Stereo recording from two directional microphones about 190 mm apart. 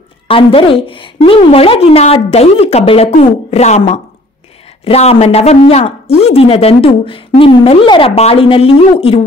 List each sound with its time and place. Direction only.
0.3 s a woman's voice: 30° left (ahead or behind)